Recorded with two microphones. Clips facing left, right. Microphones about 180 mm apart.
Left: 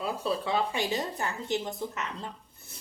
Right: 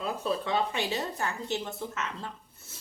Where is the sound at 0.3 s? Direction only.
15° left (ahead or behind).